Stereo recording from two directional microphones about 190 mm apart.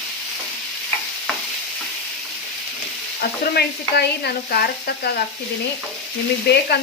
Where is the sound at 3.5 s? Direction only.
55° left (ahead or behind).